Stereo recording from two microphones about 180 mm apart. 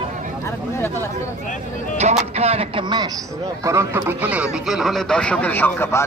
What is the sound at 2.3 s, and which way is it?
A man's voice, 35° right (ahead or behind).